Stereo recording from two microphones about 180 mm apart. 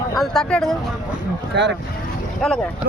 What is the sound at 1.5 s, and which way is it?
Speech, 75° right (ahead or behind).